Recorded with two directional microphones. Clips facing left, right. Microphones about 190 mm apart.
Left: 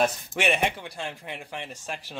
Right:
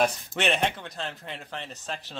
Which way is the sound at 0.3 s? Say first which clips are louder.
Left 1 dB; 10° left (ahead or behind).